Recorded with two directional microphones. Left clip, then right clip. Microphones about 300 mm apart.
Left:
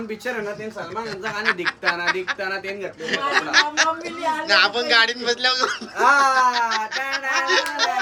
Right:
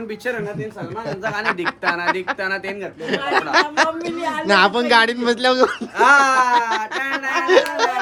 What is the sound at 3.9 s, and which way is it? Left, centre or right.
A man's voice, right.